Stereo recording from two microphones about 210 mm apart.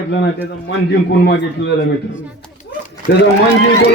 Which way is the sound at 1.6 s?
55° left (ahead or behind).